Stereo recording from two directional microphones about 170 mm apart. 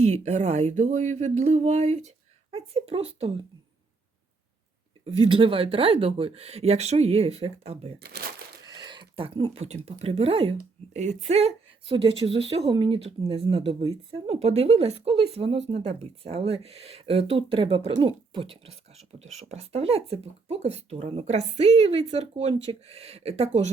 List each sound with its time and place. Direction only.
0.0 s speech: 40° right (ahead or behind)
5.0 s speech: 35° right (ahead or behind)
7.9 s speech: 70° right (ahead or behind)
8.8 s speech: 25° right (ahead or behind)